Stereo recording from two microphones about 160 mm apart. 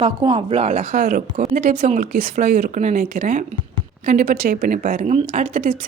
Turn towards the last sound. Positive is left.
turn(degrees=-45)  # may be behind; listen again after turning